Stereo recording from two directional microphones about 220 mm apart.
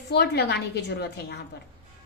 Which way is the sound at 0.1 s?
50° left (ahead or behind).